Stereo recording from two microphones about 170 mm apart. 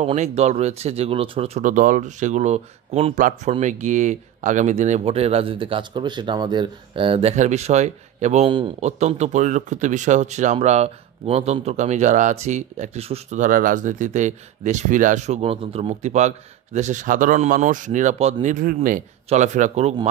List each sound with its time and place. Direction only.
0.0 s speech: 40° right (ahead or behind)
8.5 s a man's voice: 30° right (ahead or behind)
8.8 s speech: 40° right (ahead or behind)
19.2 s speech: 45° right (ahead or behind)